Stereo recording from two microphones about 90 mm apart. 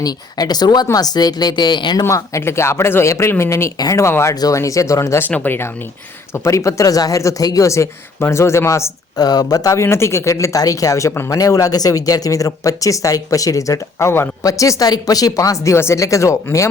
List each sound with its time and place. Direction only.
0.0 s speech: 45° left (ahead or behind)
2.0 s speech: 35° left (ahead or behind)
9.1 s speech: 45° left (ahead or behind)